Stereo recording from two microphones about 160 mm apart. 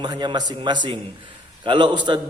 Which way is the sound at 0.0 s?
30° right (ahead or behind).